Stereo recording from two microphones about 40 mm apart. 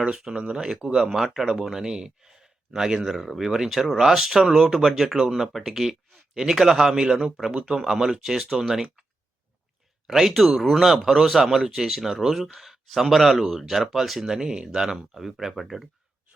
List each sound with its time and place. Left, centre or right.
0.1 s speech: centre
10.1 s speech: centre